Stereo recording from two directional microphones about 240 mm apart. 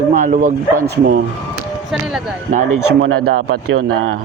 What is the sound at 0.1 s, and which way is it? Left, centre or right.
Speech, right.